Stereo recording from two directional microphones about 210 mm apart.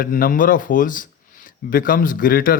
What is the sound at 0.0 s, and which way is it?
Speech, 40° left (ahead or behind).